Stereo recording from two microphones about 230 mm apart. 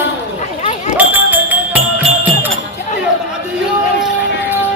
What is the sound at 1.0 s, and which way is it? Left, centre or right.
Music, centre.